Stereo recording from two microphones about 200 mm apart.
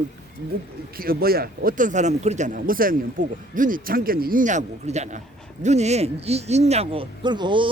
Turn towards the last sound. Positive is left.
turn(degrees=-25)  # may be behind; listen again after turning